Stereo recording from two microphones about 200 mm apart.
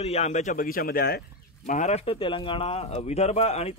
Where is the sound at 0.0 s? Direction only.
35° left (ahead or behind); by 1.2 s 50° left (ahead or behind).